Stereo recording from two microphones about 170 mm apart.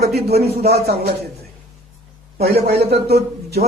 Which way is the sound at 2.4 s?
70° right (ahead or behind).